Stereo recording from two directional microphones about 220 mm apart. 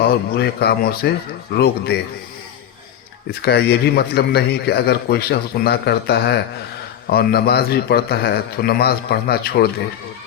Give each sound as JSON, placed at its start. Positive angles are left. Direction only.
{"t": 0.0, "sound": "a man's voice", "side_deg": 45}
{"t": 3.4, "sound": "a man's voice", "side_deg": 45}